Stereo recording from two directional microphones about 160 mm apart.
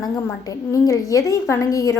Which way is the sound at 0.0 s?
20° left (ahead or behind).